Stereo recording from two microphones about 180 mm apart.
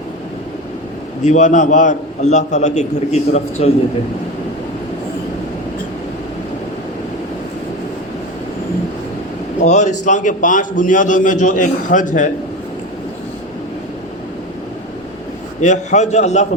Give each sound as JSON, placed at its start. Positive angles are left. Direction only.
{"t": 1.2, "sound": "a man's voice", "side_deg": 40}
{"t": 9.6, "sound": "a man's voice", "side_deg": 40}
{"t": 15.6, "sound": "a man's voice", "side_deg": 40}